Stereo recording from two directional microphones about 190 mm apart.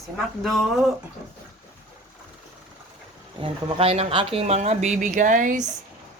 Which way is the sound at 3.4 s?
30° right (ahead or behind).